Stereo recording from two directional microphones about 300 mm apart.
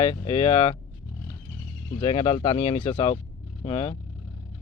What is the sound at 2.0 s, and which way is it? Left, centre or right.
Speech, centre.